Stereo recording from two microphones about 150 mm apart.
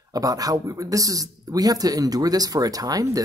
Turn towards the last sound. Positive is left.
turn(degrees=-25)  # may be behind; listen again after turning